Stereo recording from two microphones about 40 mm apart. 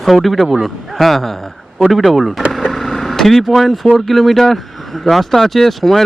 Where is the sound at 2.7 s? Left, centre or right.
Centre.